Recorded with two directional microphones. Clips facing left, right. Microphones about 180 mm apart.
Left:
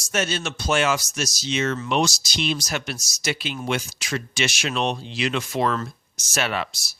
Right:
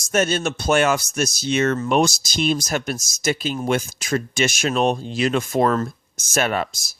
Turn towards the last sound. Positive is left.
turn(degrees=-45)  # may be behind; listen again after turning